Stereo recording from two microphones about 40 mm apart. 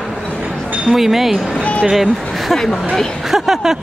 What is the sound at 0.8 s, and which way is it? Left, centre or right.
A woman's voice, centre.